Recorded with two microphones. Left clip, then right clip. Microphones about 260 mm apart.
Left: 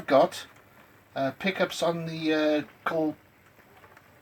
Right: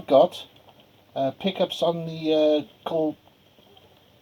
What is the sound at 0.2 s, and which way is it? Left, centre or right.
Speech, centre.